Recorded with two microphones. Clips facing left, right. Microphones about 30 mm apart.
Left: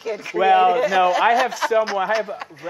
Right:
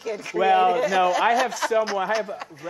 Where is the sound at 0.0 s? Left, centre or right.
Centre.